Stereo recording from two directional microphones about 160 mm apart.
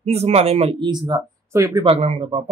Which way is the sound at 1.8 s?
40° right (ahead or behind).